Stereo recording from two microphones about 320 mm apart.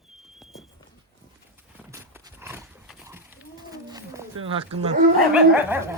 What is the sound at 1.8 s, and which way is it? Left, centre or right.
Horse, centre.